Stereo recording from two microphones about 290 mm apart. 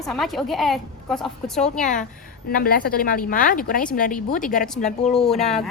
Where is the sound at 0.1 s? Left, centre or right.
Centre.